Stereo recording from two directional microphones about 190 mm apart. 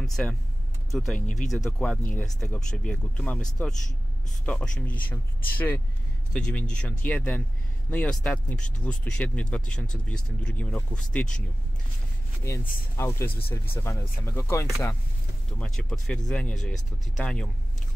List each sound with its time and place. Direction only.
0.0 s speech: centre (ahead or behind)
12.4 s speech: 15° left (ahead or behind)
15.6 s speech: 5° left (ahead or behind)